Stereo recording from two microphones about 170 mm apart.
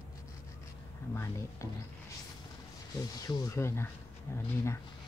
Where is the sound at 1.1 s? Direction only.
15° left (ahead or behind).